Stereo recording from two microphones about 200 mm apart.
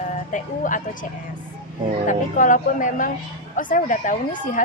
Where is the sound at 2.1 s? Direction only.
40° left (ahead or behind).